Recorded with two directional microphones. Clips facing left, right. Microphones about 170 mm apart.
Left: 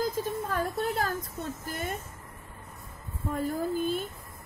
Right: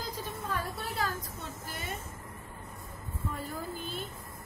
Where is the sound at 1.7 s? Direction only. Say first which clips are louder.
Left 5 dB; 45° left (ahead or behind).